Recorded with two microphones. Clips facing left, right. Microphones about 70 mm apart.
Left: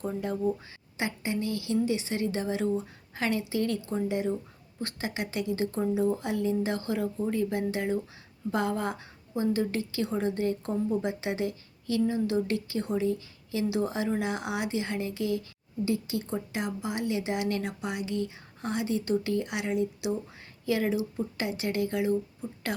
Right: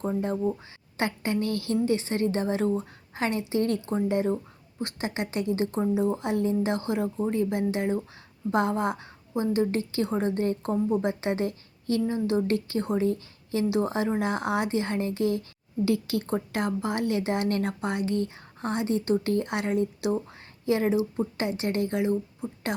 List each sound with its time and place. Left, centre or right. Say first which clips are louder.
0.2 s a woman's voice: even; right
0.9 s a woman's voice: right 4 dB; right
15.8 s a woman's voice: right 4 dB; right
20.7 s a woman's voice: right 4 dB; right